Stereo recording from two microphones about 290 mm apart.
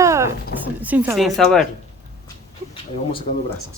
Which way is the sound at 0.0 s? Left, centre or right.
Centre.